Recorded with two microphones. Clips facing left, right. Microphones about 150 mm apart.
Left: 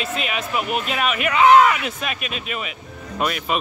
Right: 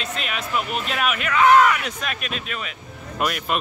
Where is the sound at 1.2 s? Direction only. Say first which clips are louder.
Left 2 dB; 15° left (ahead or behind).